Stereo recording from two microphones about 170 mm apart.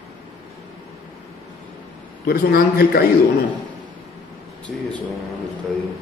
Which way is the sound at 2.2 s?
65° left (ahead or behind).